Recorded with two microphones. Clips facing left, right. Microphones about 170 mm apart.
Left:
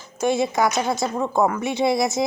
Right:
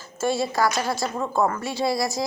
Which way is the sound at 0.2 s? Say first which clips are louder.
Left 3 dB; 20° left (ahead or behind).